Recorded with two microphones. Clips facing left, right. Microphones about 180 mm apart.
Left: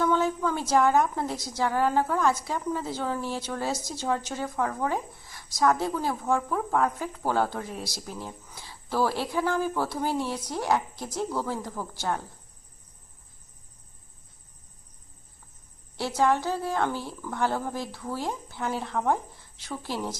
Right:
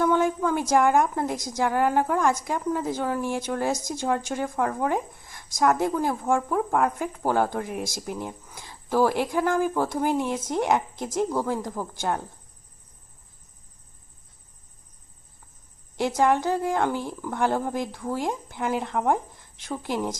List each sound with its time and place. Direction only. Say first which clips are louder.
0.0 s a woman's voice: right 3 dB; 15° right (ahead or behind)
16.0 s speech: right 3 dB; 15° right (ahead or behind)